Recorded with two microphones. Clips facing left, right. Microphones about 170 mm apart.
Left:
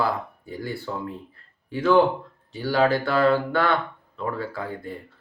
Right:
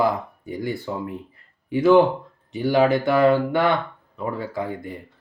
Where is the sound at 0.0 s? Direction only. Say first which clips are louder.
Right 4 dB; 20° right (ahead or behind).